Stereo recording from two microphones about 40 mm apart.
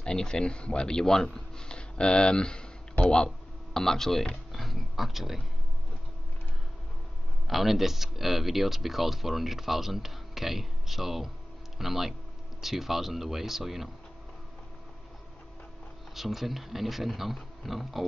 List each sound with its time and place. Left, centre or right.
0.0 s speech: left; by 5.4 s centre
7.4 s speech: centre
16.2 s speech: centre